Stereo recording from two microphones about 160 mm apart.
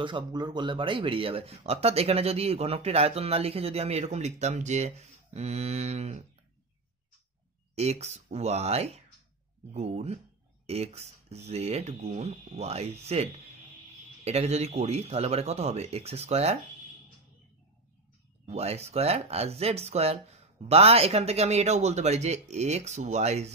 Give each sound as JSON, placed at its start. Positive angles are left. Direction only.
{"t": 0.0, "sound": "speech", "side_deg": -30}
{"t": 7.7, "sound": "speech", "side_deg": -40}
{"t": 18.4, "sound": "speech", "side_deg": -40}